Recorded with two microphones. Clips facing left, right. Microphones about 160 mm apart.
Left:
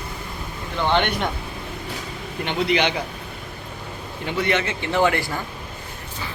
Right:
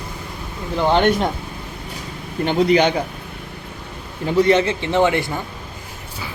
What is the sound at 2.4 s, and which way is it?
Speech, 40° right (ahead or behind).